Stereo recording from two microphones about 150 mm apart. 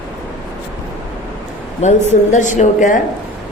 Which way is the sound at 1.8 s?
50° left (ahead or behind).